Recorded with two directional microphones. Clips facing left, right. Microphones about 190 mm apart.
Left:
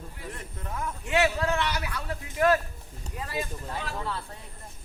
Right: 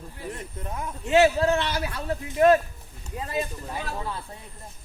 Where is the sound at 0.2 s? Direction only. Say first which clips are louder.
Right 6 dB; 20° right (ahead or behind).